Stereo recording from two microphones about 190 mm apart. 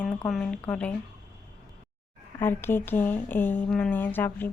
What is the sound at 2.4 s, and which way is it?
A woman's voice, 10° left (ahead or behind).